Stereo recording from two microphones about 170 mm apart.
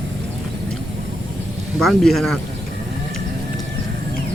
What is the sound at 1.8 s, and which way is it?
Speech, centre (ahead or behind).